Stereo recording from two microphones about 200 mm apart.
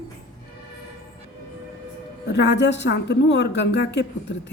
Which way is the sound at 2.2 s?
60° left (ahead or behind).